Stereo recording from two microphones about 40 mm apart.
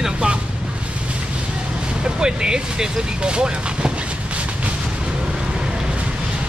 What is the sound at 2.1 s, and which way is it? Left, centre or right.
Speech, centre.